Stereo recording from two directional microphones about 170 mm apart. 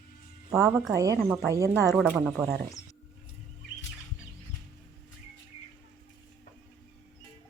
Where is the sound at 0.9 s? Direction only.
20° right (ahead or behind).